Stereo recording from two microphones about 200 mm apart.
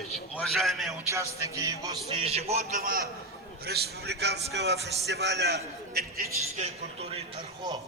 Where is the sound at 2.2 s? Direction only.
30° right (ahead or behind); by 6.2 s 50° right (ahead or behind).